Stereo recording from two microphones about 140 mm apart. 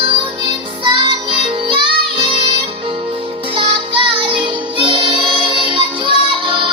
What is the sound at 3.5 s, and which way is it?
Music, 40° right (ahead or behind).